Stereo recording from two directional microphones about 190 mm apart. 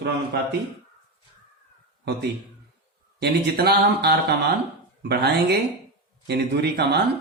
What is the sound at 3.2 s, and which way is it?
Speech, 60° right (ahead or behind).